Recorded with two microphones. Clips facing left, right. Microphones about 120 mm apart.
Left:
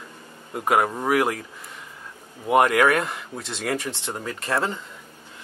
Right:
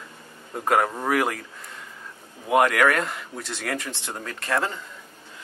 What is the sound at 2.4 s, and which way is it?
Speech, 15° left (ahead or behind).